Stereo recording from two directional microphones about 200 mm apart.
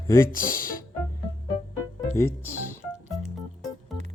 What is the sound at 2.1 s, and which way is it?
Music, 15° left (ahead or behind).